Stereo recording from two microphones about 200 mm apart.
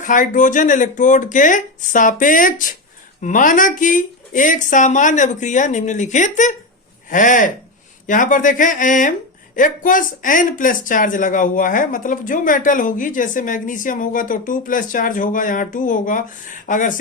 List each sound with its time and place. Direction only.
0.0 s speech: 40° left (ahead or behind)